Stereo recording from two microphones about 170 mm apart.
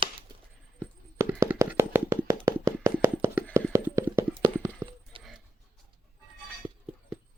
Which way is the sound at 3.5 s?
15° right (ahead or behind).